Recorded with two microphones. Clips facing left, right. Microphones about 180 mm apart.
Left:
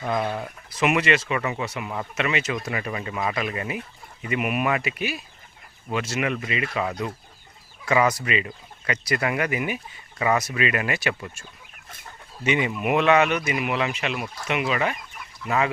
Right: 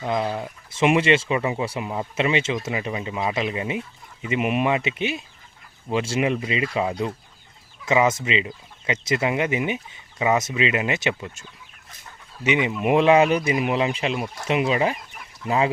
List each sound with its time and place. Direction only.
0.0 s speech: 20° right (ahead or behind)
12.8 s speech: 30° right (ahead or behind)